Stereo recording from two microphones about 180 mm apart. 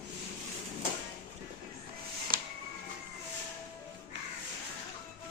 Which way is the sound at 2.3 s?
55° right (ahead or behind).